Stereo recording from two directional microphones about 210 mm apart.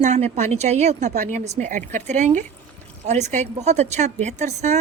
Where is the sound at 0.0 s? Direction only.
35° right (ahead or behind).